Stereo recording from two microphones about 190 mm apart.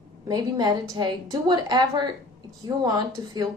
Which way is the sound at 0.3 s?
20° right (ahead or behind).